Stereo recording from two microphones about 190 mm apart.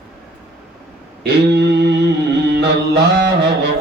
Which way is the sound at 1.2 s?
60° right (ahead or behind).